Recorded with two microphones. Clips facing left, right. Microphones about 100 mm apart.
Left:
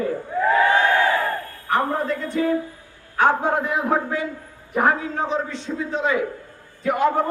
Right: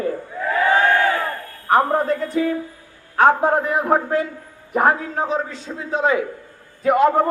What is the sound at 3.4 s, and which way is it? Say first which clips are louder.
A man's voice: right 3 dB; 45° right (ahead or behind).